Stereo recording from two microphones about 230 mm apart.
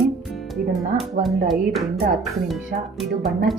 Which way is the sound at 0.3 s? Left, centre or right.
Centre.